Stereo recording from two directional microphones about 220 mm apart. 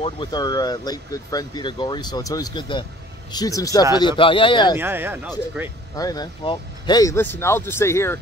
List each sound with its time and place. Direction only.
0.0 s speech: 20° left (ahead or behind)
4.7 s speech: 10° right (ahead or behind)
5.9 s speech: 15° left (ahead or behind)